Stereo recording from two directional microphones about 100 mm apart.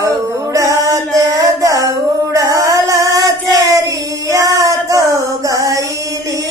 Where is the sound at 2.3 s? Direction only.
35° right (ahead or behind).